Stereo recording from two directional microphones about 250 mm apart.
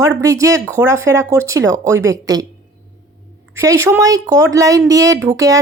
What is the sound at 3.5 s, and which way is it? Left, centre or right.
Speech, centre.